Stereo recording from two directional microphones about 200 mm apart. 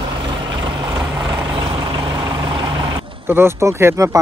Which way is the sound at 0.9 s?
20° right (ahead or behind).